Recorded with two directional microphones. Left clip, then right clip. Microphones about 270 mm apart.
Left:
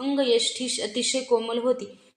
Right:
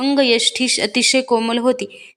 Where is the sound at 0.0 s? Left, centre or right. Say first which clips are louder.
Right 7 dB; right.